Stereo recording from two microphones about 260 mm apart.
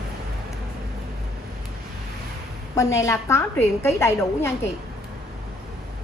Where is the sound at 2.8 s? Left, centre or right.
Centre.